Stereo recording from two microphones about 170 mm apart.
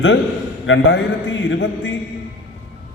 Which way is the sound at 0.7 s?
90° left.